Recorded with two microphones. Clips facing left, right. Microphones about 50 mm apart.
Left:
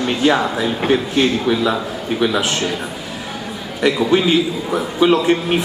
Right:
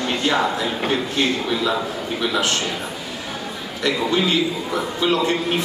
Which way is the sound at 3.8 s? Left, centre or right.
Centre.